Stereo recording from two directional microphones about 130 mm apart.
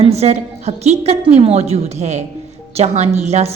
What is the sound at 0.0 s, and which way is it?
A woman's voice, 55° right (ahead or behind).